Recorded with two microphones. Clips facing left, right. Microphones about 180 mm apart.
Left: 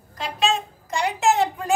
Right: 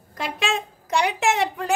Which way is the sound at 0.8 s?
75° right (ahead or behind).